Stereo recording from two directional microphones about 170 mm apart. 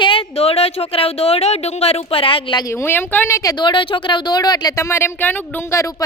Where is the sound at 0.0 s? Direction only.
30° left (ahead or behind).